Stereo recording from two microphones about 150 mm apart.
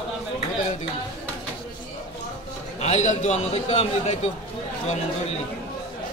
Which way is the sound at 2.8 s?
50° left (ahead or behind).